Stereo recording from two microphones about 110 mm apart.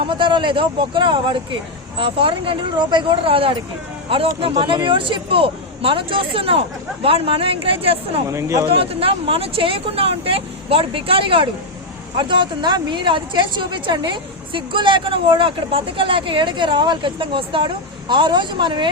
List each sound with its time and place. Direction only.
0.0 s a man's voice: 45° right (ahead or behind)
8.3 s speech: 25° right (ahead or behind)
8.7 s a man's voice: 60° right (ahead or behind)